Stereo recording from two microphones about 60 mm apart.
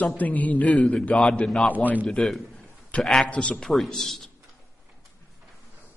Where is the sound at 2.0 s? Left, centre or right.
Centre.